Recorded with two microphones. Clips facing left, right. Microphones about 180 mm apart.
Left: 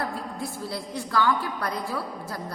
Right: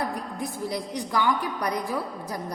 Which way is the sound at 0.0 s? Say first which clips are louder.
Right 1 dB; 15° right (ahead or behind).